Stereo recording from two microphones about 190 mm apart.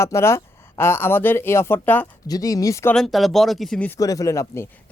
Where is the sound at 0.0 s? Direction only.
15° left (ahead or behind).